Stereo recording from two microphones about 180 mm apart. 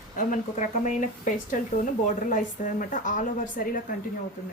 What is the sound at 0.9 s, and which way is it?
Speech, 45° left (ahead or behind).